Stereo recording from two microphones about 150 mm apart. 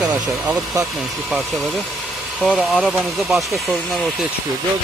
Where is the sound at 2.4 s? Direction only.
Centre (ahead or behind).